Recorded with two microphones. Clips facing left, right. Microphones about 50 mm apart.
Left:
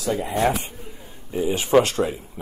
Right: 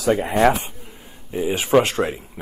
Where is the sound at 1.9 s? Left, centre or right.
Right.